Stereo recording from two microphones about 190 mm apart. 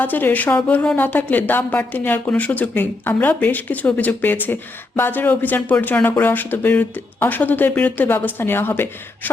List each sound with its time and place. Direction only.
0.0 s speech: 10° left (ahead or behind)